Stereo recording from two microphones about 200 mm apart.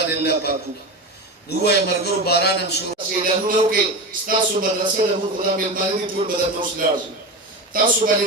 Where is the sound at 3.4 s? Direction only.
45° right (ahead or behind).